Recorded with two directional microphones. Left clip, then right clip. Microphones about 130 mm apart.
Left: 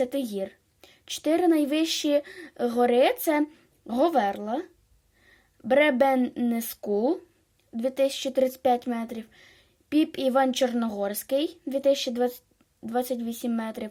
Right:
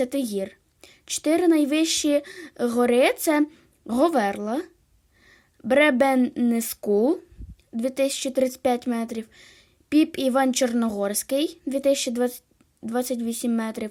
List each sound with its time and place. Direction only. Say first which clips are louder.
0.0 s a woman's voice: right 2 dB; 40° right (ahead or behind)
7.8 s a woman's voice: right 1 dB; 40° right (ahead or behind)